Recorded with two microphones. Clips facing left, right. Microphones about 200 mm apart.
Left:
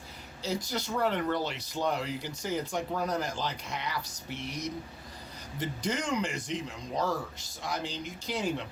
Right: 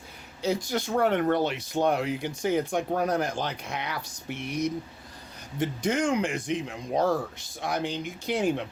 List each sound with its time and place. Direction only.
0.4 s speech: 55° right (ahead or behind)